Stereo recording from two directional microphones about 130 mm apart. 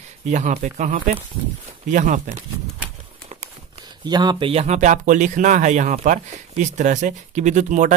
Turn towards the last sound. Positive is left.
turn(degrees=-70)  # may be behind; listen again after turning